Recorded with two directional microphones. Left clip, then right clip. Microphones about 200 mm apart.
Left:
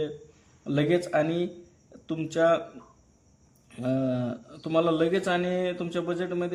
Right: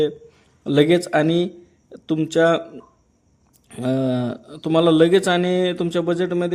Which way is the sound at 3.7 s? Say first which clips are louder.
Right 6 dB; 40° right (ahead or behind).